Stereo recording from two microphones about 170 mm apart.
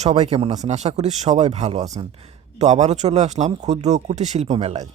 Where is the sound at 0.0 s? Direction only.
35° right (ahead or behind).